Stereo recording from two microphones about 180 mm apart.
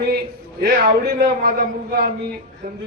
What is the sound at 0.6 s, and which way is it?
A man's voice, 60° right (ahead or behind).